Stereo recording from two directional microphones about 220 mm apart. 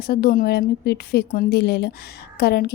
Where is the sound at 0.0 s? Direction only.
45° left (ahead or behind).